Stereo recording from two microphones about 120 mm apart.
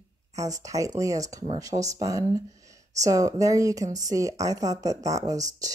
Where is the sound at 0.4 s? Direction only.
30° right (ahead or behind).